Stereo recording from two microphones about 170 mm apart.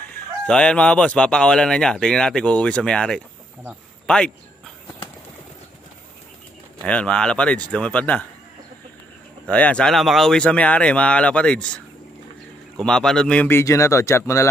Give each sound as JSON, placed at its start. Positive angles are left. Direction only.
{"t": 0.1, "sound": "speech", "side_deg": 5}
{"t": 6.8, "sound": "speech", "side_deg": 5}
{"t": 9.5, "sound": "speech", "side_deg": 5}